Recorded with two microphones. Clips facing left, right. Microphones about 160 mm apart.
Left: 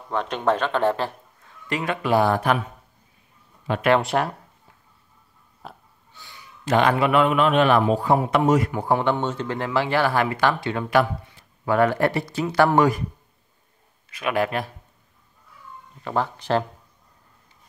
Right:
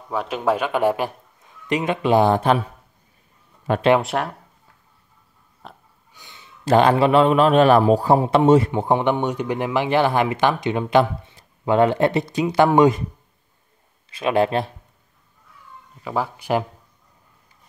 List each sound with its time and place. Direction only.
0.1 s a man's voice: 5° right (ahead or behind); by 2.6 s 25° right (ahead or behind)
3.7 s speech: 55° right (ahead or behind)
4.0 s speech: centre (ahead or behind)
5.6 s burping: 5° left (ahead or behind)
6.1 s a sound: 20° right (ahead or behind)
6.6 s a man's voice: 30° right (ahead or behind)
14.1 s a man's voice: 25° right (ahead or behind)
16.0 s speech: 5° right (ahead or behind)